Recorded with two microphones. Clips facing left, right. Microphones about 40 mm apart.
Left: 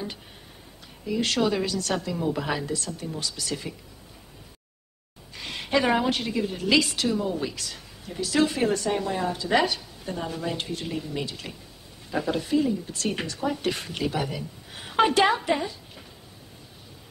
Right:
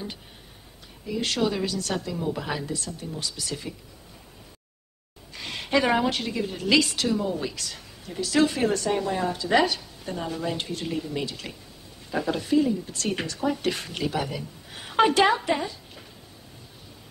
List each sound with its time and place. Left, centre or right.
1.0 s a woman's voice: centre
1.7 s a woman's voice: centre
2.0 s a woman's voice: centre
2.7 s a woman's voice: centre
5.3 s a sound: centre
6.0 s a woman's voice: centre
7.1 s a woman's voice: centre
7.5 s a sound: centre
8.2 s a woman's voice: centre
11.2 s a woman's voice: centre
12.1 s a woman's voice: centre
12.8 s a woman's voice: centre